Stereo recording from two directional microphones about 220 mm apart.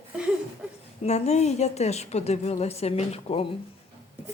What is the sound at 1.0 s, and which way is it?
A woman's voice, 30° left (ahead or behind).